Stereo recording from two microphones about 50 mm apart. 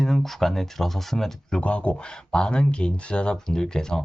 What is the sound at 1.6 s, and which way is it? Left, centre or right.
Speech, left.